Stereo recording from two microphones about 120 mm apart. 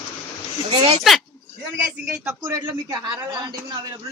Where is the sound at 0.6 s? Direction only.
50° right (ahead or behind).